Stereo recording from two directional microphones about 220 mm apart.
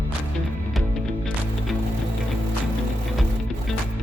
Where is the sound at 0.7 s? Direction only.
Centre (ahead or behind).